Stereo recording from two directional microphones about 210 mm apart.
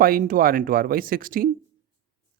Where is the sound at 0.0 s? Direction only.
40° right (ahead or behind).